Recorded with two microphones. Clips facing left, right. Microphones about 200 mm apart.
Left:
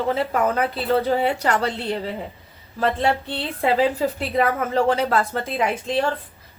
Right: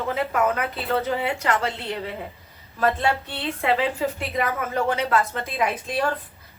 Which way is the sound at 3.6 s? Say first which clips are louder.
Left 4 dB; 35° left (ahead or behind).